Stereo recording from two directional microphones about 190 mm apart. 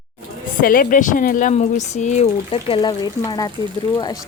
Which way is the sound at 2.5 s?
25° left (ahead or behind).